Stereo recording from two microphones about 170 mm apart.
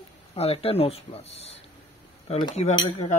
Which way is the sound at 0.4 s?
35° left (ahead or behind).